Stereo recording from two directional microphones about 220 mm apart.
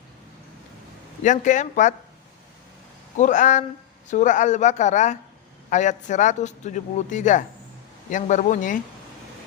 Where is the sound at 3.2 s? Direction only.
35° left (ahead or behind).